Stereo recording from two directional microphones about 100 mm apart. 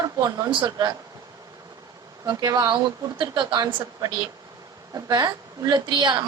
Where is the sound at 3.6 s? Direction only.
40° right (ahead or behind).